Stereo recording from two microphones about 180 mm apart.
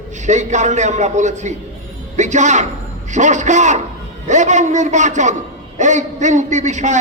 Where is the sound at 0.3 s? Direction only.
40° right (ahead or behind).